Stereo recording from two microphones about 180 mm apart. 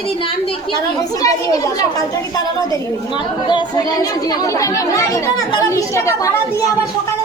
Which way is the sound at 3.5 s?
20° left (ahead or behind).